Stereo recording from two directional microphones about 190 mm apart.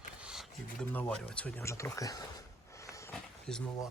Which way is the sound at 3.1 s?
5° left (ahead or behind).